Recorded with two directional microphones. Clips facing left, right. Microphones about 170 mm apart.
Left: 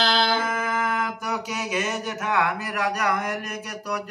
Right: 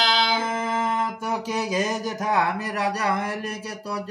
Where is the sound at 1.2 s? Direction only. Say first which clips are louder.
Right 3 dB; 30° right (ahead or behind).